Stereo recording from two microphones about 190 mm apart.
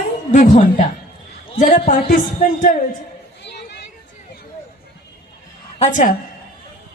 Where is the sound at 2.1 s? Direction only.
45° left (ahead or behind).